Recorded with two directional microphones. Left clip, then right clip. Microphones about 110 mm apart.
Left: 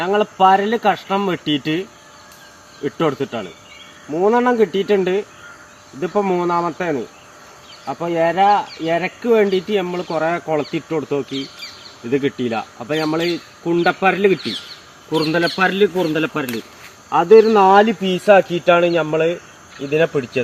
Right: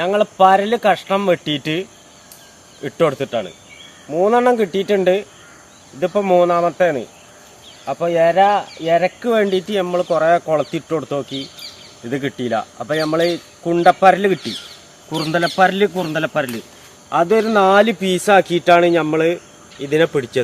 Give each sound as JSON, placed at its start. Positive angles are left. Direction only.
{"t": 0.0, "sound": "speech", "side_deg": -30}
{"t": 2.8, "sound": "speech", "side_deg": -25}
{"t": 17.2, "sound": "speech", "side_deg": -10}
{"t": 17.5, "sound": "speech", "side_deg": -20}